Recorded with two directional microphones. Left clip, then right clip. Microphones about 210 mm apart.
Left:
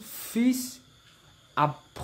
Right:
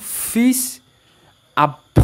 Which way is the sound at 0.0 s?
30° right (ahead or behind).